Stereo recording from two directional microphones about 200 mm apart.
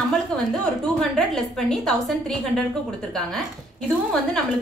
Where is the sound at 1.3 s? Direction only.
Centre (ahead or behind).